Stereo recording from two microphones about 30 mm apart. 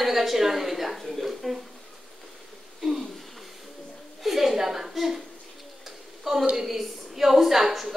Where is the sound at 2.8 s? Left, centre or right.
Centre.